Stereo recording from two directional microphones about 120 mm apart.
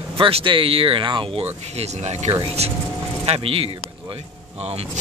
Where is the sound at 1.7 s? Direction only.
65° right (ahead or behind); by 3.7 s 50° right (ahead or behind).